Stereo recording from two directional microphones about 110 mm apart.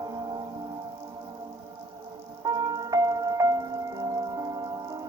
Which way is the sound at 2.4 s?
35° right (ahead or behind).